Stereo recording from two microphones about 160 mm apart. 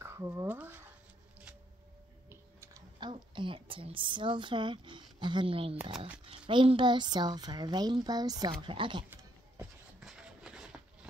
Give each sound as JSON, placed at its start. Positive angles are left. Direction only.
{"t": 0.0, "sound": "speech", "side_deg": -15}
{"t": 2.2, "sound": "music", "side_deg": -15}
{"t": 3.0, "sound": "a woman's voice", "side_deg": -30}
{"t": 9.1, "sound": "a sound", "side_deg": -15}